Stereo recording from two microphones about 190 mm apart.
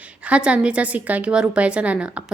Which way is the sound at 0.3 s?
5° right (ahead or behind).